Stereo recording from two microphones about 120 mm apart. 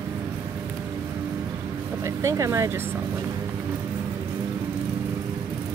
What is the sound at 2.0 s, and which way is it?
Speech, 25° right (ahead or behind).